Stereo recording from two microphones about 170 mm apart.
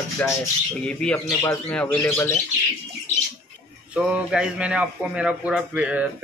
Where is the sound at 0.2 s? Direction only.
10° left (ahead or behind).